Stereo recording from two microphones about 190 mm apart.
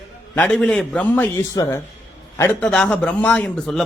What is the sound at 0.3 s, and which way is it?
Speech, 5° left (ahead or behind).